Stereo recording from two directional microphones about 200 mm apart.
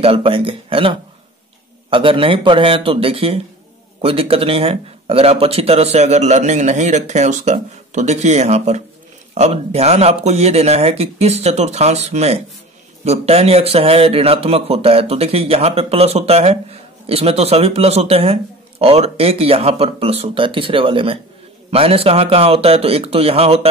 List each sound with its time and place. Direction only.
0.0 s speech: 25° right (ahead or behind)